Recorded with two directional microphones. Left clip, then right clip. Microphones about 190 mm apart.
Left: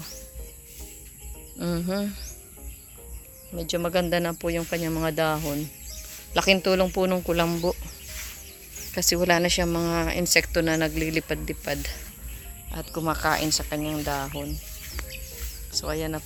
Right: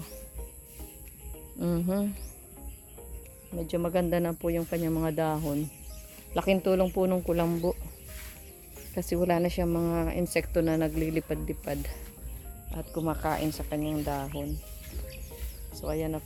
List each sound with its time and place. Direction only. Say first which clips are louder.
1.5 s speech: left 2 dB; 10° right (ahead or behind)
3.6 s speech: left 4 dB; 5° right (ahead or behind)
7.5 s speech: left 3 dB; 10° left (ahead or behind)
9.0 s speech: left 6 dB; centre (ahead or behind)
13.1 s speech: left 7 dB; 5° left (ahead or behind)
15.9 s speech: even; 5° left (ahead or behind)